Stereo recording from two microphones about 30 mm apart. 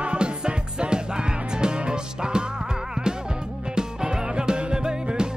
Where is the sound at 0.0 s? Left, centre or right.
Right.